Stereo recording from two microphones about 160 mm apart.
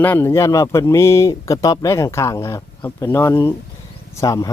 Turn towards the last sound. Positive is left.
turn(degrees=20)  # may be behind; listen again after turning